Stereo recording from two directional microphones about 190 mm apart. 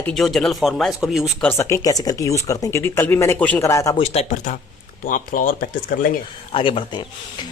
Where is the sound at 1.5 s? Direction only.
15° left (ahead or behind).